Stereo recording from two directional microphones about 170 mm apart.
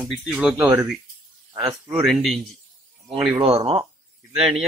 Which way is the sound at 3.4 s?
35° right (ahead or behind).